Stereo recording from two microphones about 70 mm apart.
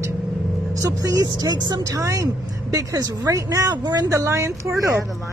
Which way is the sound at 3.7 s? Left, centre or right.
Right.